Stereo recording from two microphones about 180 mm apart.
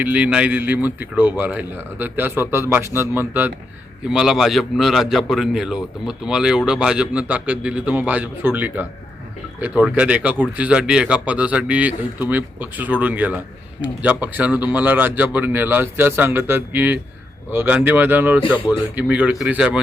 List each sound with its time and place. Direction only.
0.0 s a man's voice: 5° right (ahead or behind)